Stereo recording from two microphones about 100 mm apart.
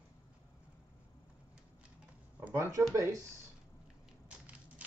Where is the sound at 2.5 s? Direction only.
30° right (ahead or behind).